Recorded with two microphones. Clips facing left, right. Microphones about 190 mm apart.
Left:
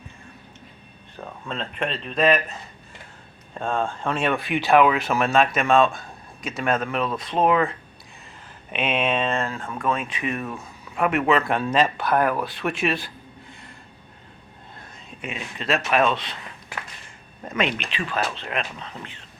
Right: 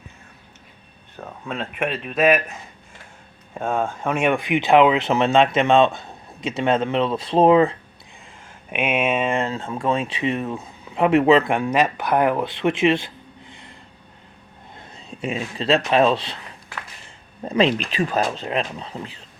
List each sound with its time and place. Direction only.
1.2 s speech: 10° right (ahead or behind)
3.5 s speech: 10° right (ahead or behind); by 7.8 s 30° right (ahead or behind)
8.7 s speech: 10° right (ahead or behind)
14.8 s speech: 30° right (ahead or behind)
17.4 s speech: 30° right (ahead or behind)